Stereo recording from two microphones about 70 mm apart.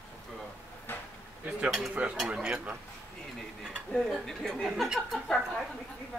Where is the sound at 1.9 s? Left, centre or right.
Centre.